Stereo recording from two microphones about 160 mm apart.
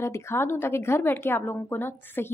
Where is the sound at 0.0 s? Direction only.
15° left (ahead or behind).